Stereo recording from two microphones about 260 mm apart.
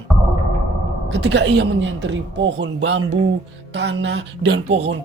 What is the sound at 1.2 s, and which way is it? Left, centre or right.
Speech, right.